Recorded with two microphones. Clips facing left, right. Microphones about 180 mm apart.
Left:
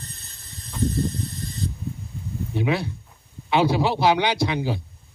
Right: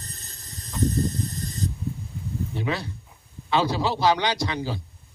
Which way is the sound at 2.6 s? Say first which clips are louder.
Left 7 dB; 15° left (ahead or behind).